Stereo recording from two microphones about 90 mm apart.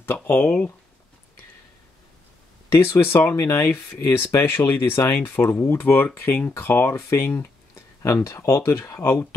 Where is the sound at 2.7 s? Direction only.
30° left (ahead or behind).